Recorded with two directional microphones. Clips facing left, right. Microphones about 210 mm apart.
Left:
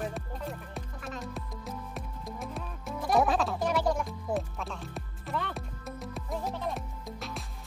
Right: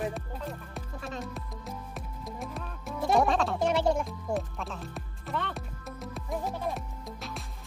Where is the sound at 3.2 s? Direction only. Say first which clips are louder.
Even; centre (ahead or behind).